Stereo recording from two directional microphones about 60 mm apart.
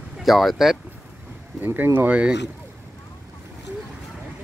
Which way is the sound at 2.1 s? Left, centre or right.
Centre.